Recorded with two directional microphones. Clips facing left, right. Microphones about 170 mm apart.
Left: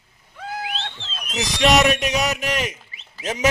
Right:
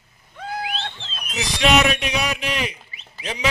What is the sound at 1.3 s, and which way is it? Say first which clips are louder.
A man's voice: left 1 dB; 40° left (ahead or behind).